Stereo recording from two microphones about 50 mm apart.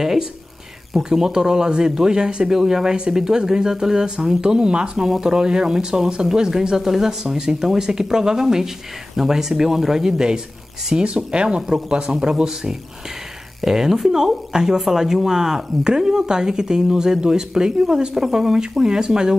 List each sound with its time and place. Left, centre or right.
0.0 s speech: centre